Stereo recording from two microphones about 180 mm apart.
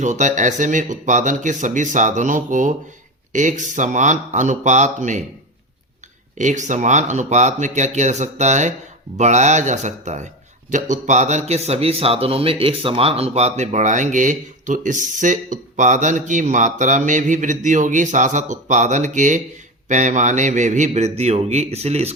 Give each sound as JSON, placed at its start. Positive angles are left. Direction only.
{"t": 0.0, "sound": "speech", "side_deg": -40}
{"t": 6.3, "sound": "speech", "side_deg": -45}